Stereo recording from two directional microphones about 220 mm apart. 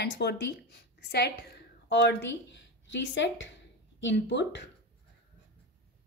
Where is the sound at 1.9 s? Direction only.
50° left (ahead or behind).